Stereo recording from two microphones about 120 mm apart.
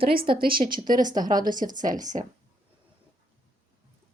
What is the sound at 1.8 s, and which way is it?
Speech, 90° right.